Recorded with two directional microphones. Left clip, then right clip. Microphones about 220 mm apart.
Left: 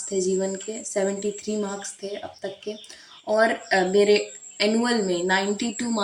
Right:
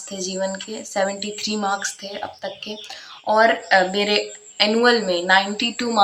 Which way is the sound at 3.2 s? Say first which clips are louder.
Right 5 dB; 5° left (ahead or behind).